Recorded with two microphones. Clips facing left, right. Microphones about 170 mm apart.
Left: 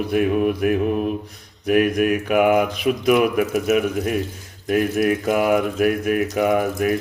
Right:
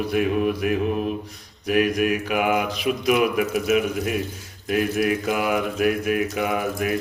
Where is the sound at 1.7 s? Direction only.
50° left (ahead or behind).